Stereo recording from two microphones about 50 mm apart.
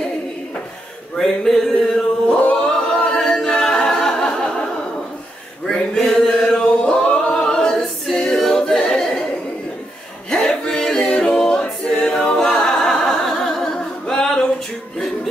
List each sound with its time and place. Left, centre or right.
1.1 s a sound: centre
2.5 s choir: centre
3.4 s a capella: centre
5.9 s chant: centre
7.2 s a capella: centre
10.3 s music: centre
10.8 s a capella: centre